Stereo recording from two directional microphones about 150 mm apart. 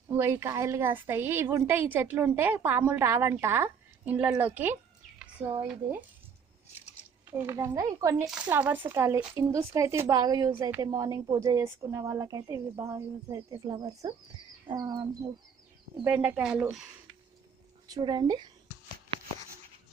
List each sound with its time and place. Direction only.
0.2 s a woman's voice: 15° right (ahead or behind)
7.3 s speech: 15° right (ahead or behind)
8.3 s a woman's voice: 10° right (ahead or behind); by 15.3 s 30° right (ahead or behind)
16.0 s a woman's voice: 10° right (ahead or behind)
17.8 s speech: 30° right (ahead or behind)